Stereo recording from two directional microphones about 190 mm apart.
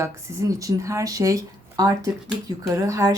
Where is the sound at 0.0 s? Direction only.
15° right (ahead or behind).